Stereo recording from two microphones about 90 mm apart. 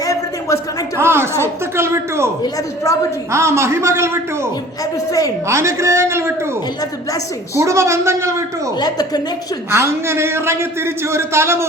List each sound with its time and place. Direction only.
0.0 s a sound: 40° left (ahead or behind)
0.9 s a man's voice: 25° right (ahead or behind)
3.3 s a man's voice: 30° right (ahead or behind)
5.5 s a man's voice: 30° right (ahead or behind)
7.6 s a man's voice: 35° right (ahead or behind)
8.8 s a woman's voice: 50° left (ahead or behind)
9.7 s a man's voice: 30° right (ahead or behind)